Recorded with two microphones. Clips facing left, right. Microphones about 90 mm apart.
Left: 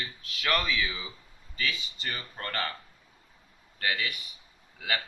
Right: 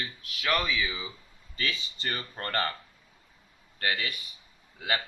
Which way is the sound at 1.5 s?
35° right (ahead or behind).